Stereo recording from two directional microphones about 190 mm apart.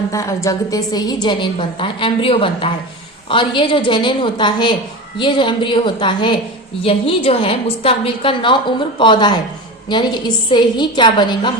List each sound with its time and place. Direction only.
0.1 s a woman's voice: 15° left (ahead or behind)